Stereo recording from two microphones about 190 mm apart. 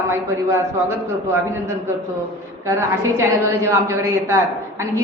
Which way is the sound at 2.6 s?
15° right (ahead or behind).